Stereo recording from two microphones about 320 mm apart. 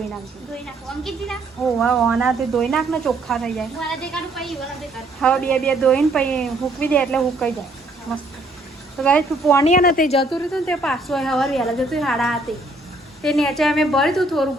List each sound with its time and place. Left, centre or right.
0.6 s speech: centre
9.0 s speech: centre
9.6 s a woman's voice: left
10.5 s speech: centre